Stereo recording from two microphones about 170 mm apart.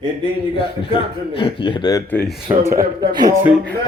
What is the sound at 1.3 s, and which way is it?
Speech, 35° left (ahead or behind).